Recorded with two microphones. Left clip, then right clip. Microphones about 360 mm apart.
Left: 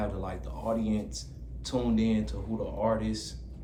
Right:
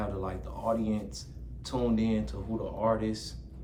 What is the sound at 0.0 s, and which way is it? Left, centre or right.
Speech, centre.